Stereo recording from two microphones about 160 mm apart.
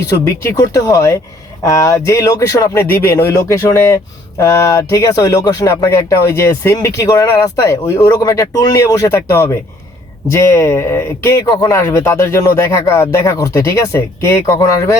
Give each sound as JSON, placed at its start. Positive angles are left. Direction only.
{"t": 0.1, "sound": "speech", "side_deg": 20}